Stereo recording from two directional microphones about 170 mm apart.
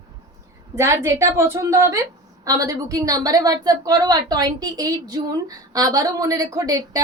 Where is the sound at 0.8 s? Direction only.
15° right (ahead or behind).